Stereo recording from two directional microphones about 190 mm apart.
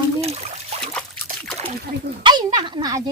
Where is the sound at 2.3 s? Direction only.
25° right (ahead or behind).